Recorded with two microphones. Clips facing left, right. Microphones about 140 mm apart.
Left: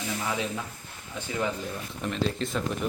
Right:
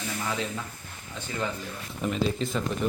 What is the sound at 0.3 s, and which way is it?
Speech, 15° left (ahead or behind).